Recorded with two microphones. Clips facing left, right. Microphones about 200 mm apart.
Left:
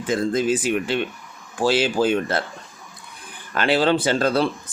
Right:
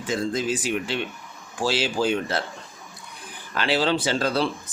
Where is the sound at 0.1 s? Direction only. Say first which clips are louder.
Left 5 dB; 55° left (ahead or behind).